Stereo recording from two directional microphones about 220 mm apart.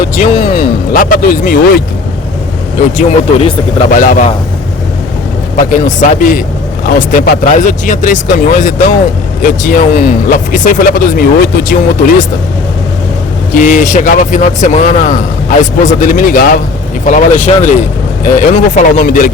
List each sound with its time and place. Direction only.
0.0 s music: 40° left (ahead or behind)
3.0 s speech: 30° left (ahead or behind)
5.5 s speech: 35° left (ahead or behind)
13.5 s speech: 35° left (ahead or behind)